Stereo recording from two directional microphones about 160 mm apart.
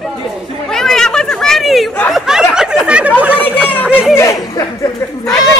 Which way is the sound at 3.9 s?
5° right (ahead or behind).